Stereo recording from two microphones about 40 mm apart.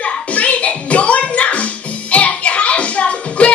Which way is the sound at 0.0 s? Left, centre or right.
Left.